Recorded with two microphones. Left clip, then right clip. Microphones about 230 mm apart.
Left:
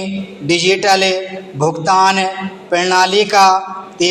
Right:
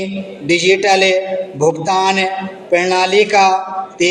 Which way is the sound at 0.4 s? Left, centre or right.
Left.